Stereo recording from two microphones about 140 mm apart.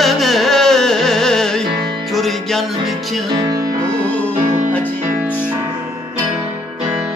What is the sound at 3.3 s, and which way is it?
Music, 35° right (ahead or behind).